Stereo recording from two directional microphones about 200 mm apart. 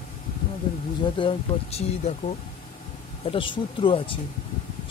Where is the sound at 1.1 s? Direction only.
30° left (ahead or behind).